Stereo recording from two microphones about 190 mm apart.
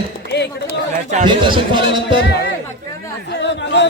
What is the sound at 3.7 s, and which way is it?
Speech, 65° left (ahead or behind).